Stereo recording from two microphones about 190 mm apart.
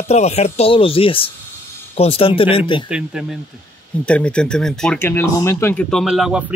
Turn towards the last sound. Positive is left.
turn(degrees=0)  # may be behind; listen again after turning